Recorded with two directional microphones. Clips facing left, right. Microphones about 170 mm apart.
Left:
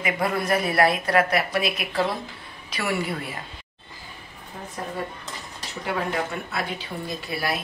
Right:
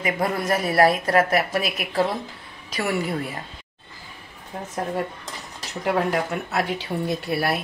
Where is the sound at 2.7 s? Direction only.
45° right (ahead or behind).